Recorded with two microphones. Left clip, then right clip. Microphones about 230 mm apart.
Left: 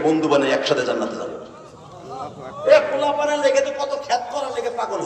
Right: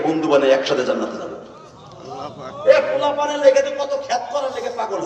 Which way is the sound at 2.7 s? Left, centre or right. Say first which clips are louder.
Right 1 dB; left.